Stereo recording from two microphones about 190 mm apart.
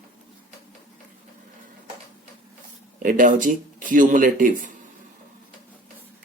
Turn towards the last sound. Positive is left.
turn(degrees=-45)  # may be behind; listen again after turning